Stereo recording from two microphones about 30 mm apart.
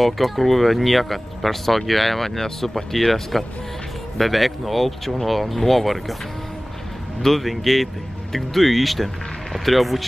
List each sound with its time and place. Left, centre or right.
0.0 s speech: centre
7.2 s speech: centre